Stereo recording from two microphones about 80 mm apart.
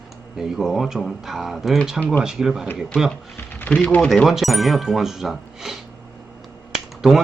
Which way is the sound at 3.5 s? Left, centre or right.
Centre.